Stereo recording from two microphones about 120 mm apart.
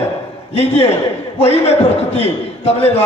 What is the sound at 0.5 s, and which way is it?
A man's voice, 60° left (ahead or behind).